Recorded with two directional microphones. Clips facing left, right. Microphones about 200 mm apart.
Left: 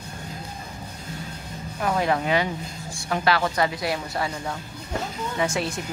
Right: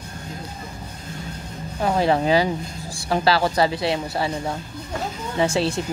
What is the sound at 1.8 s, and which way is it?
A woman's voice, 30° right (ahead or behind).